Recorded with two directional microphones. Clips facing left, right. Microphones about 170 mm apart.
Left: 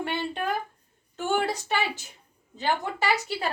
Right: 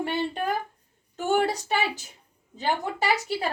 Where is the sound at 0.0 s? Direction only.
40° right (ahead or behind).